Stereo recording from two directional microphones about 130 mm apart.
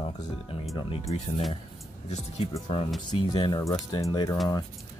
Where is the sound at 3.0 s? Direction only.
35° left (ahead or behind).